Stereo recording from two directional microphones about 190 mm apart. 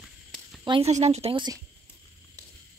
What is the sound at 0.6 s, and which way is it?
Speech, 30° right (ahead or behind).